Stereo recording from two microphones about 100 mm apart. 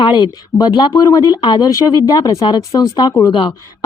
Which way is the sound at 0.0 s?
50° left (ahead or behind).